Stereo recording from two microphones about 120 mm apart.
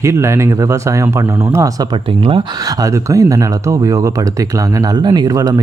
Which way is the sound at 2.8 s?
25° right (ahead or behind).